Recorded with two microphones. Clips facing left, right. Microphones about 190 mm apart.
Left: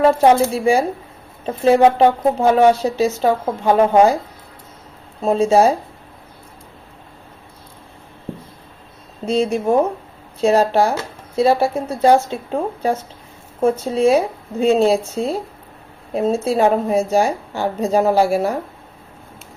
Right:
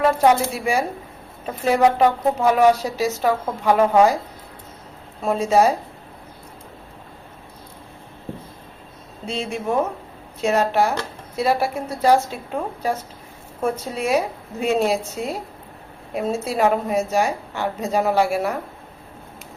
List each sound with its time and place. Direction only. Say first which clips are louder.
0.0 s speech: left 4 dB; 30° left (ahead or behind)
5.2 s speech: left 4 dB; 30° left (ahead or behind)
9.2 s speech: left 8 dB; 40° left (ahead or behind)